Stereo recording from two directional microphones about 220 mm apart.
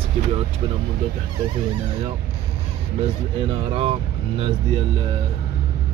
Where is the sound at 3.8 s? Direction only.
25° right (ahead or behind).